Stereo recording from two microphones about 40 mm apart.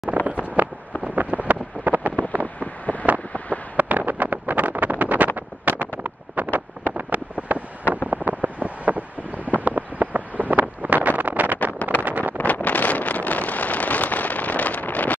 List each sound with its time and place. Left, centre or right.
0.1 s vehicle: right
1.0 s a sound: right
2.9 s wind noise: left
3.3 s a sound: left
3.7 s a sound: right
6.0 s wind noise: right
7.3 s vehicle: right
9.7 s a sound: right
10.5 s vehicle: right
11.5 s vehicle: left
12.0 s vehicle: right
12.4 s vehicle: left